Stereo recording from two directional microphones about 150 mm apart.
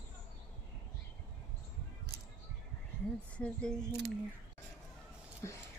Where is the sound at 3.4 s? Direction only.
5° left (ahead or behind).